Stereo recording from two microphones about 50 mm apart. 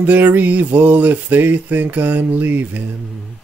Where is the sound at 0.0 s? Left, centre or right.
Right.